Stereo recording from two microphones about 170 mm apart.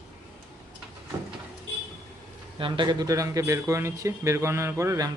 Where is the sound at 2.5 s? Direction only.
30° right (ahead or behind).